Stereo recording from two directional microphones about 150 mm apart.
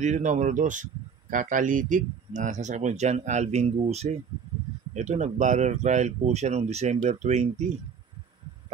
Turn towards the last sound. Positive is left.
turn(degrees=-50)  # may be behind; listen again after turning